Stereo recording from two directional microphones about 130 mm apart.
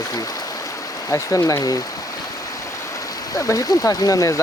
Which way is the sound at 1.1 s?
25° left (ahead or behind).